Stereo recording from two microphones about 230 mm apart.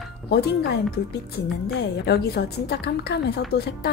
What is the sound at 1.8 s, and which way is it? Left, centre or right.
A woman's voice, left.